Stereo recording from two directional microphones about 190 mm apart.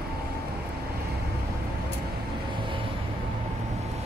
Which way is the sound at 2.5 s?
25° right (ahead or behind).